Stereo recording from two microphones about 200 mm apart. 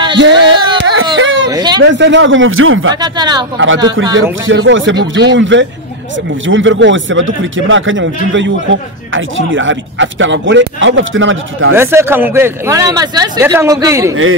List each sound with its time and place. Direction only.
0.2 s a sound: 65° right (ahead or behind)
1.5 s a sound: 20° right (ahead or behind)
1.8 s speech: 60° right (ahead or behind); by 2.9 s 85° right
3.0 s speech: 20° right (ahead or behind)
3.5 s speech: 75° right (ahead or behind)
11.7 s speech: 10° right (ahead or behind)